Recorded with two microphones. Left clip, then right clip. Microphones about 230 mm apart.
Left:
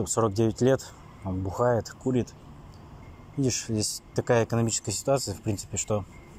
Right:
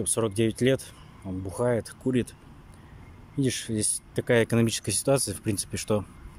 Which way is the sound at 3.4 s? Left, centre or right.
Centre.